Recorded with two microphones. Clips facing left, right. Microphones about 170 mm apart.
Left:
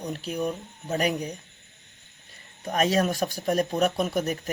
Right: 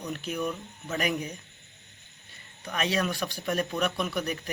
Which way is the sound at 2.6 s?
40° left (ahead or behind).